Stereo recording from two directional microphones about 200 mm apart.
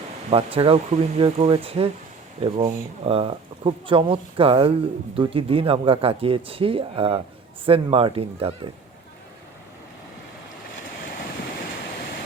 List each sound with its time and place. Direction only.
0.3 s speech: 30° right (ahead or behind)